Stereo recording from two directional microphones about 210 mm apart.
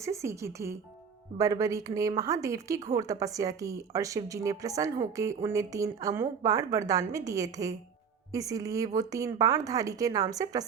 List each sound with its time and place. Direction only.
0.0 s speech: 15° right (ahead or behind)